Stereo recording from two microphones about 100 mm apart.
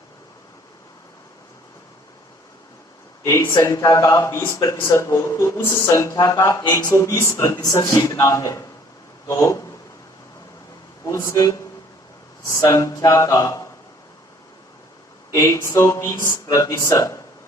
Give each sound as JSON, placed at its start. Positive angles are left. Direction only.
{"t": 3.2, "sound": "speech", "side_deg": 30}
{"t": 7.6, "sound": "speech", "side_deg": 40}
{"t": 7.9, "sound": "speech", "side_deg": 30}
{"t": 11.0, "sound": "speech", "side_deg": 30}
{"t": 15.3, "sound": "speech", "side_deg": 30}
{"t": 16.5, "sound": "speech", "side_deg": 35}